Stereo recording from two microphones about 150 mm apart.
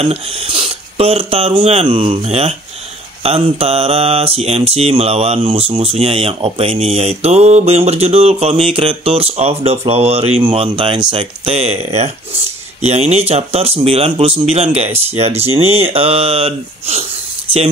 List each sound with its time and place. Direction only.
0.0 s mantra: 40° right (ahead or behind)
12.8 s speech: 45° right (ahead or behind)
15.1 s mantra: 45° right (ahead or behind)